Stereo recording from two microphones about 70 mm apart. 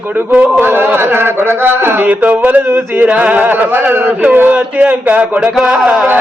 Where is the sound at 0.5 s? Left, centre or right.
Right.